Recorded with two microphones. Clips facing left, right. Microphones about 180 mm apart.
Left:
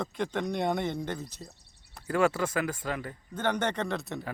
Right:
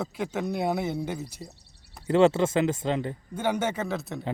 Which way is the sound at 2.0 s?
25° right (ahead or behind).